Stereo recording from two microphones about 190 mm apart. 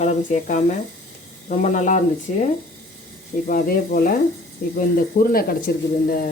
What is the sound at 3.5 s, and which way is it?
Speech, 50° left (ahead or behind).